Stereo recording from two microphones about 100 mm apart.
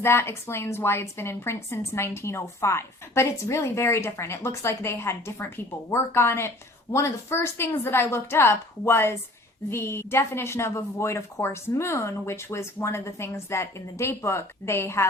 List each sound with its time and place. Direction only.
0.0 s a woman's voice: 25° left (ahead or behind)